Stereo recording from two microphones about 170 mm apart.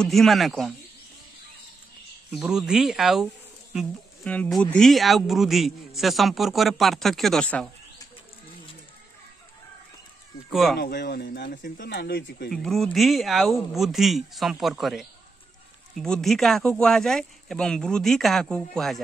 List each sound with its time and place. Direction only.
0.0 s speech: centre (ahead or behind)
2.3 s speech: 5° right (ahead or behind)
10.5 s speech: centre (ahead or behind)
10.8 s speech: 75° left (ahead or behind)
11.5 s speech: 50° left (ahead or behind)
11.9 s speech: 80° left
12.4 s speech: centre (ahead or behind)